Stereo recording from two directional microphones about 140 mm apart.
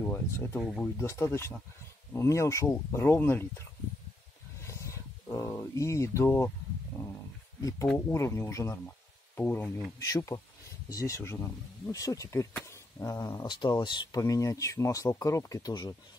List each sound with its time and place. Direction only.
0.0 s speech: 15° left (ahead or behind)
0.6 s speech: centre (ahead or behind)
0.9 s speech: 20° left (ahead or behind)
4.6 s speech: 20° left (ahead or behind)
8.1 s speech: 20° left (ahead or behind)